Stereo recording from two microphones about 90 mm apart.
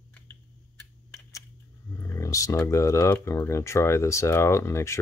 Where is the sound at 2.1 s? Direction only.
35° left (ahead or behind).